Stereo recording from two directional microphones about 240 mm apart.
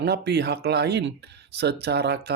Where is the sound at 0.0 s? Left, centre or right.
Right.